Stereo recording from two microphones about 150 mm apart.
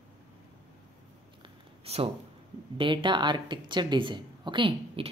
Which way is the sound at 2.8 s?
35° right (ahead or behind).